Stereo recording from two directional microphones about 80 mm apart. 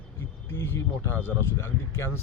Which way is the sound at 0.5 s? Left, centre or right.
Left.